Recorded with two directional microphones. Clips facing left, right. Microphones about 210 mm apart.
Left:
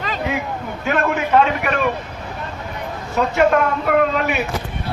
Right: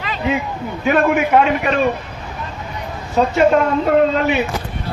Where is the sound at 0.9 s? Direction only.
15° right (ahead or behind).